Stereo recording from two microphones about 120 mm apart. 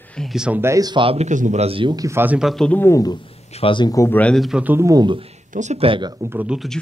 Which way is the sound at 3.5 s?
45° left (ahead or behind).